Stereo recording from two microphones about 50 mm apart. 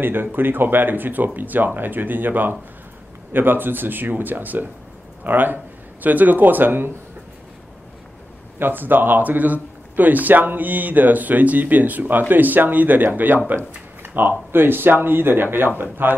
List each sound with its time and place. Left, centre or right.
0.0 s a man's voice: right
8.5 s a man's voice: right